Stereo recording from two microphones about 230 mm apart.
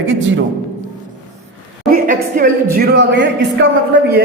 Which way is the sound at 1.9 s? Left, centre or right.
Right.